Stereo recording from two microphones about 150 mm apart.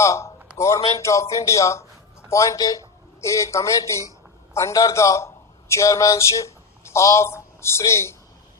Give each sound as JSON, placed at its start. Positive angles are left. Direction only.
{"t": 0.0, "sound": "a man's voice", "side_deg": 20}